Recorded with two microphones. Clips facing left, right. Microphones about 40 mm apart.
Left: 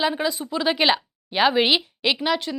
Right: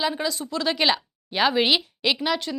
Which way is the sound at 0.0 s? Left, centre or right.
Centre.